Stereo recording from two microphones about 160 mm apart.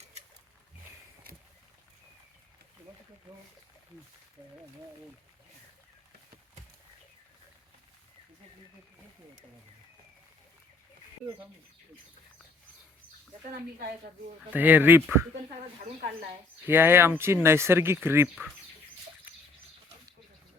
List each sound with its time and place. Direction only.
13.7 s a woman's voice: 65° right (ahead or behind)
14.5 s speech: 10° right (ahead or behind)
16.6 s speech: 15° right (ahead or behind)